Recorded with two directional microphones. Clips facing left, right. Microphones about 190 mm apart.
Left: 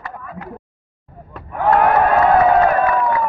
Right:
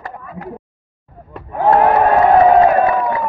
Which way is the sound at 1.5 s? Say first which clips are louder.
Right 2 dB; 25° right (ahead or behind).